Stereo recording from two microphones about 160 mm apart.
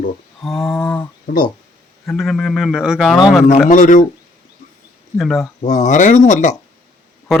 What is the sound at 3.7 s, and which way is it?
Speech, 55° left (ahead or behind).